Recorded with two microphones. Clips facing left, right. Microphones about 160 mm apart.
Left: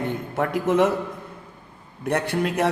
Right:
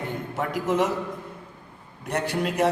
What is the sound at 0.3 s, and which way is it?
Speech, 60° left (ahead or behind).